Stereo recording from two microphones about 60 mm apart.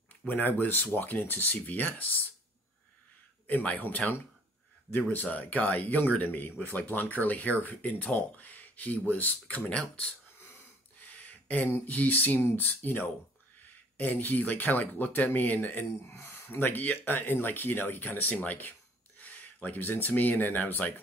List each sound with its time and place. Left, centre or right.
0.3 s speech: left
3.4 s speech: left
11.0 s a sound: left
11.8 s speech: left
16.1 s speech: left